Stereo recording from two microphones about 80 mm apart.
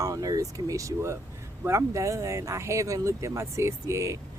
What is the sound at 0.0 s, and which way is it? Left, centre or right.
Speech, right.